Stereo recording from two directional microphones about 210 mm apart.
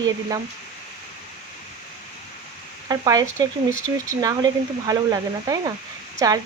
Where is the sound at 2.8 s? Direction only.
15° right (ahead or behind).